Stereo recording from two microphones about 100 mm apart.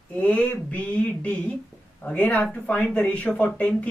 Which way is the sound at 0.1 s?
15° left (ahead or behind).